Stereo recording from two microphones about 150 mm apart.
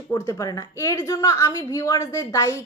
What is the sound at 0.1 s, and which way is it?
A woman's voice, 25° left (ahead or behind).